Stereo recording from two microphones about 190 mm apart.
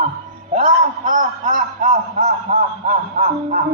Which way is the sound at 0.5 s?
45° right (ahead or behind).